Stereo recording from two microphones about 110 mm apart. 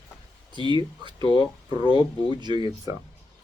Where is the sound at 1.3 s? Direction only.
50° left (ahead or behind).